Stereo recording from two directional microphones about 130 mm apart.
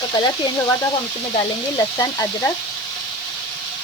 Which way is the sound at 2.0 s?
25° left (ahead or behind).